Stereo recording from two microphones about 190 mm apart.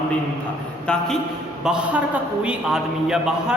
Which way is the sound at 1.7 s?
5° right (ahead or behind).